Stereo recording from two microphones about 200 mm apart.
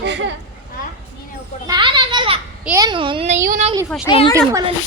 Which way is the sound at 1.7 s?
25° right (ahead or behind).